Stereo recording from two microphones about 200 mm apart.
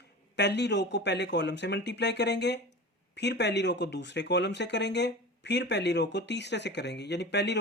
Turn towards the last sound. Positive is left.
turn(degrees=60)  # may be behind; listen again after turning